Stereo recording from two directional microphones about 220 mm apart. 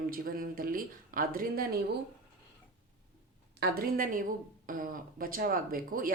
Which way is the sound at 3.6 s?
40° right (ahead or behind).